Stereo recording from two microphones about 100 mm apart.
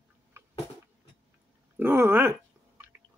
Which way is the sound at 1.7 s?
20° right (ahead or behind).